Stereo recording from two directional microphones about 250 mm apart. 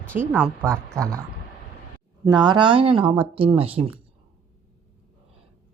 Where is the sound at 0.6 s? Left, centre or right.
Centre.